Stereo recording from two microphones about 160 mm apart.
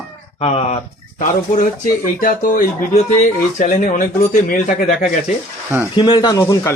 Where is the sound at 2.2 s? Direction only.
55° left (ahead or behind).